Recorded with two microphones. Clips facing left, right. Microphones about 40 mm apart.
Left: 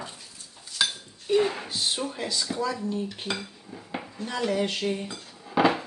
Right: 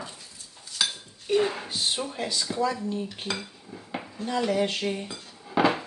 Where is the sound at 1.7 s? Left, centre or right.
Centre.